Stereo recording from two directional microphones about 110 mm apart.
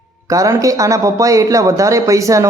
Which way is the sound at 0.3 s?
30° right (ahead or behind).